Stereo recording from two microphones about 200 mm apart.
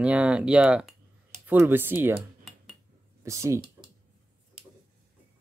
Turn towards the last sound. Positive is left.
turn(degrees=-15)  # may be behind; listen again after turning